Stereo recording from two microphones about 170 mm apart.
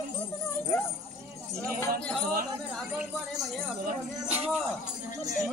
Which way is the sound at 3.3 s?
5° left (ahead or behind).